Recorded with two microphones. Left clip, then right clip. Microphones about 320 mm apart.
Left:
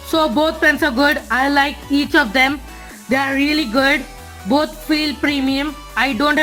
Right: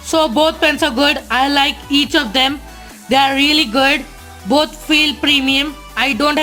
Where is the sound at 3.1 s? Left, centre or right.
Centre.